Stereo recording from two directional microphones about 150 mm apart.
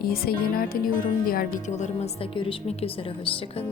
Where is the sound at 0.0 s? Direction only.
90° left.